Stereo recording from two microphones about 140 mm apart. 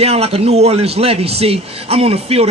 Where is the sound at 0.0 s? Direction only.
45° right (ahead or behind).